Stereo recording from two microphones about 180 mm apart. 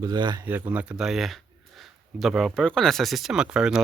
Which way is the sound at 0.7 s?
5° right (ahead or behind).